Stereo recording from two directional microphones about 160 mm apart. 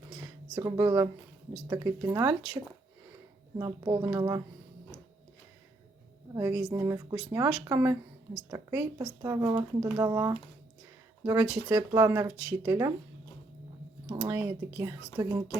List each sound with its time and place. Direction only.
0.5 s speech: 20° right (ahead or behind)
3.6 s speech: 20° right (ahead or behind)
6.3 s speech: 15° right (ahead or behind)
14.1 s speech: 15° right (ahead or behind)